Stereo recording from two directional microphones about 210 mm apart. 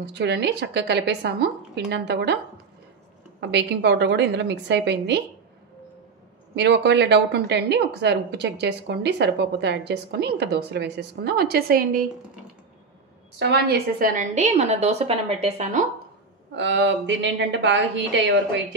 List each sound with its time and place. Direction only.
0.0 s a woman's voice: 55° right (ahead or behind)
3.3 s speech: 55° right (ahead or behind)
6.5 s a woman's voice: 55° right (ahead or behind)
13.4 s a woman's voice: 50° right (ahead or behind); by 15.8 s 30° right (ahead or behind)
16.5 s speech: 60° right (ahead or behind)